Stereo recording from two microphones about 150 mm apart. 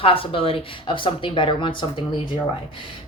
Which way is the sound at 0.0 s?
35° left (ahead or behind).